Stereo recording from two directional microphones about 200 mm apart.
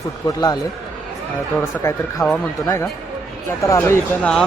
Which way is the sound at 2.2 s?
Centre (ahead or behind).